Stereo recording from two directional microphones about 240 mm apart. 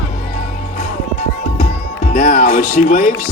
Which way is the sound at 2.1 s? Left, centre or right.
Left.